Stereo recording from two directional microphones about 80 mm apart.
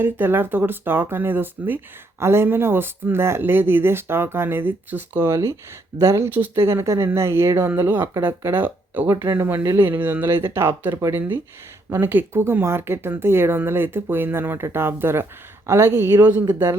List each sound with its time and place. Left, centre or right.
0.0 s speech: right